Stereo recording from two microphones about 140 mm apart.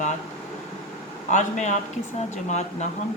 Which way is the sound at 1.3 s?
60° left (ahead or behind).